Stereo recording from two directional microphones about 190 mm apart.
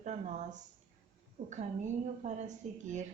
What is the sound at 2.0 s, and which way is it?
A woman's voice, 40° right (ahead or behind).